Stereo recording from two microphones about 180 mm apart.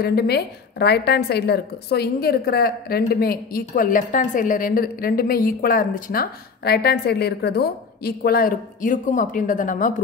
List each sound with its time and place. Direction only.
0.0 s a woman's voice: 60° left (ahead or behind); by 9.9 s 45° left (ahead or behind)